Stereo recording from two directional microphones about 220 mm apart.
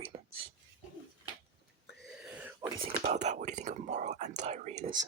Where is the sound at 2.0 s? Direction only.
5° right (ahead or behind).